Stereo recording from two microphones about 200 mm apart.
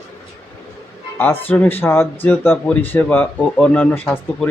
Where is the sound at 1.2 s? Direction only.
10° left (ahead or behind).